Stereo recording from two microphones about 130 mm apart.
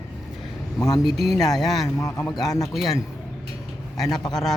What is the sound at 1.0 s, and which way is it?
Speech, centre (ahead or behind).